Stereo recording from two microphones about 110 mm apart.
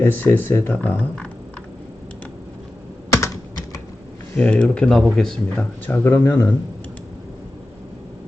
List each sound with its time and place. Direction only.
0.0 s speech: 20° left (ahead or behind)
4.4 s speech: 10° left (ahead or behind)
5.8 s speech: 20° left (ahead or behind)